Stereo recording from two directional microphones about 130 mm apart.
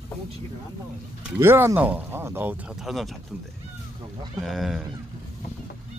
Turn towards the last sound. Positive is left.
turn(degrees=0)  # may be behind; listen again after turning